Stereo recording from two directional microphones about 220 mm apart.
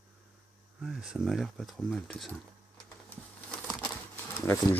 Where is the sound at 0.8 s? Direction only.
Centre (ahead or behind).